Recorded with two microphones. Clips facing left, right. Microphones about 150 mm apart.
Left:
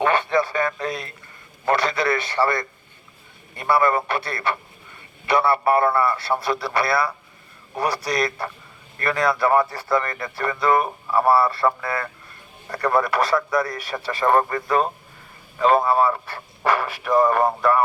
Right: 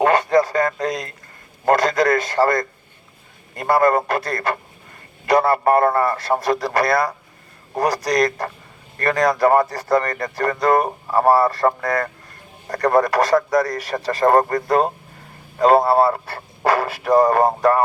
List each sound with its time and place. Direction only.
0.0 s a man's voice: 40° right (ahead or behind)